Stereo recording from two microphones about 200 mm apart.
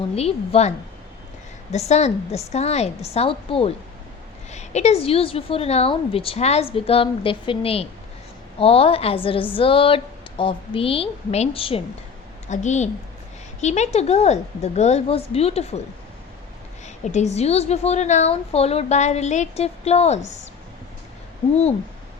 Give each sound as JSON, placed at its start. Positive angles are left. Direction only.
{"t": 0.2, "sound": "a woman's voice", "side_deg": 30}
{"t": 1.7, "sound": "a woman's voice", "side_deg": 35}
{"t": 16.8, "sound": "a woman's voice", "side_deg": 35}